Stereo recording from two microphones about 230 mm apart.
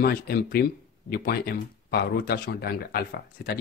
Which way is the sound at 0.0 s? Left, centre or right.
Left.